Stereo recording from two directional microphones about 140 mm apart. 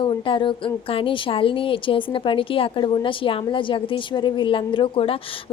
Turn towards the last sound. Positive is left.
turn(degrees=40)  # may be behind; listen again after turning